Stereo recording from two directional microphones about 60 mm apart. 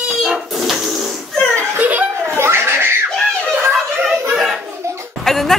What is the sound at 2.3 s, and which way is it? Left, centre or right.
Laughter, right.